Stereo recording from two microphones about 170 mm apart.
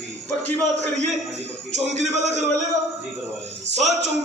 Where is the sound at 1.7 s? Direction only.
45° right (ahead or behind).